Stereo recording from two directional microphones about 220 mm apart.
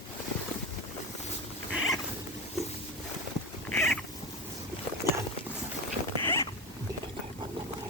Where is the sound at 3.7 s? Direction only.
5° left (ahead or behind).